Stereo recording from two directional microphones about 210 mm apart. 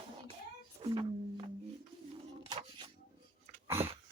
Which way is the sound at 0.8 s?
25° right (ahead or behind).